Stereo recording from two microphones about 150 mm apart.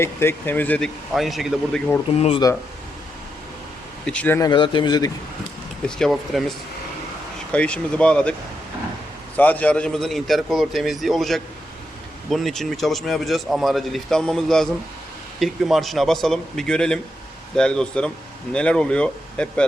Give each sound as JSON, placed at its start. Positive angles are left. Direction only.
{"t": 0.0, "sound": "speech", "side_deg": 15}
{"t": 1.1, "sound": "a man's voice", "side_deg": 0}
{"t": 2.0, "sound": "speech", "side_deg": 45}
{"t": 4.0, "sound": "speech", "side_deg": 10}
{"t": 4.4, "sound": "speech", "side_deg": 30}
{"t": 6.0, "sound": "a man's voice", "side_deg": 0}
{"t": 7.5, "sound": "speech", "side_deg": 10}
{"t": 9.4, "sound": "a man's voice", "side_deg": 10}